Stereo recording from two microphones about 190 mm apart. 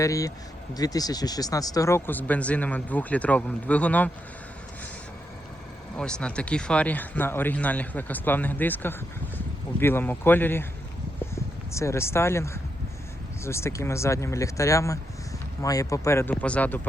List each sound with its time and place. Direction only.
0.0 s speech: 15° left (ahead or behind)
6.0 s speech: 5° left (ahead or behind)
11.7 s speech: 15° left (ahead or behind)